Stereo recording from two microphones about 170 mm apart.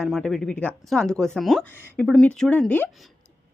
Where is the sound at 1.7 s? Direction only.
15° left (ahead or behind).